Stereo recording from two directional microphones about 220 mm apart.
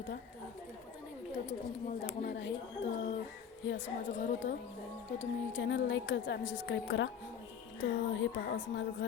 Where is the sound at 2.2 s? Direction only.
50° left (ahead or behind).